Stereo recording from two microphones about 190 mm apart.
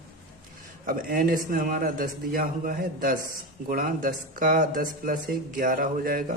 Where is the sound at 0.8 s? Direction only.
45° right (ahead or behind).